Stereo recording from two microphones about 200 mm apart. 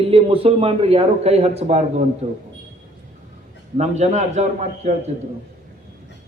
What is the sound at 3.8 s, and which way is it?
A man's voice, 35° right (ahead or behind).